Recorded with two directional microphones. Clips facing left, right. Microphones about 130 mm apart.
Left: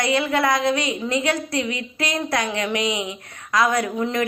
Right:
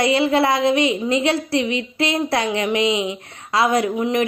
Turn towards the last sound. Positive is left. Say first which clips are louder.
# right 3 dB
turn(degrees=-20)  # may be behind; listen again after turning